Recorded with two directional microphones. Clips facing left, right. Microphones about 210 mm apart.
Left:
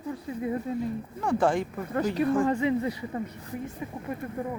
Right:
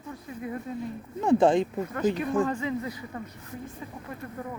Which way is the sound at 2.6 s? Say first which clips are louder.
Left 5 dB; 25° left (ahead or behind).